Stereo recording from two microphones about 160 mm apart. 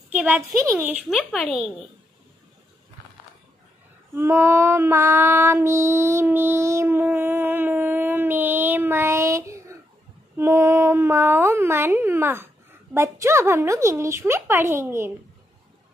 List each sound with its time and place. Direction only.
0.1 s speech: 10° right (ahead or behind)
1.1 s speech: centre (ahead or behind)
4.1 s female singing: 15° right (ahead or behind)
10.3 s speech: 15° right (ahead or behind)